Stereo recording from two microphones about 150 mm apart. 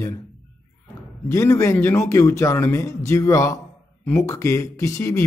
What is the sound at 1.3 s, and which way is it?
Speech, 20° left (ahead or behind).